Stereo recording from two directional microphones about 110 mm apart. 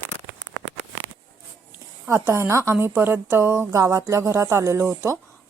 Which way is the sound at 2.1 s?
25° right (ahead or behind).